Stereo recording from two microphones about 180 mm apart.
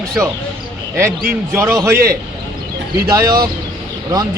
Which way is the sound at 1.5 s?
15° right (ahead or behind).